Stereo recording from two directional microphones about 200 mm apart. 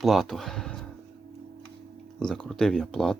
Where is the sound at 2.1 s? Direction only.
Centre (ahead or behind).